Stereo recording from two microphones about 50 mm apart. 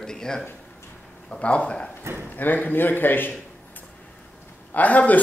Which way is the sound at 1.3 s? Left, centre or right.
Left.